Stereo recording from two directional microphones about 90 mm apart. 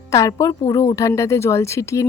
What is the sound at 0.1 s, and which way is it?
Speech, 35° left (ahead or behind).